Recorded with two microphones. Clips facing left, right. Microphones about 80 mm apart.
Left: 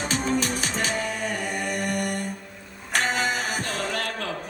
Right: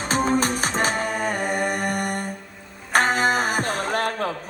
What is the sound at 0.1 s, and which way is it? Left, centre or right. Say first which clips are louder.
Music: right 6 dB; right.